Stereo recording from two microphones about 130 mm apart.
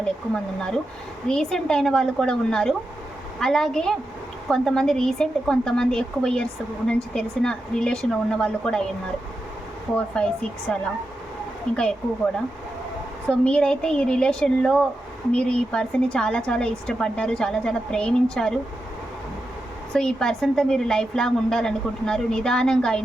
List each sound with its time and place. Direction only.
1.3 s a woman's voice: 5° left (ahead or behind)
9.9 s speech: 5° left (ahead or behind)
11.8 s a woman's voice: 5° left (ahead or behind)
19.9 s a woman's voice: 5° left (ahead or behind)